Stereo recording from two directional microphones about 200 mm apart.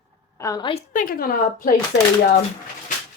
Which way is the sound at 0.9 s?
45° left (ahead or behind).